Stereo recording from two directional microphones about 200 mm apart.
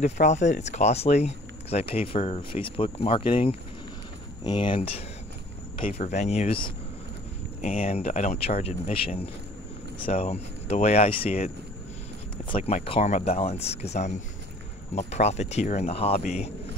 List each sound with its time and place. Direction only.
0.0 s speech: 35° left (ahead or behind)